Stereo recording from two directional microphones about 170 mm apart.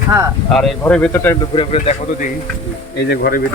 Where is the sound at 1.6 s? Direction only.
35° left (ahead or behind).